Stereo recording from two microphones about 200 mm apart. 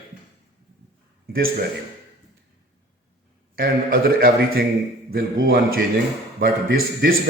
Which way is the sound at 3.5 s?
45° right (ahead or behind).